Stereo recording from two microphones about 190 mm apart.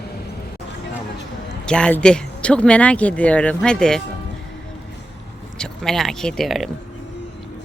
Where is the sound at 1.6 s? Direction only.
5° left (ahead or behind).